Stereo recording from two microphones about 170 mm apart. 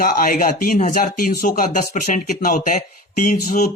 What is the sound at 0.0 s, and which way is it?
Speech, 55° left (ahead or behind).